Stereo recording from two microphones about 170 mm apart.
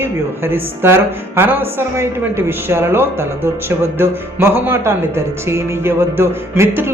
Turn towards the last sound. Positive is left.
turn(degrees=-15)  # may be behind; listen again after turning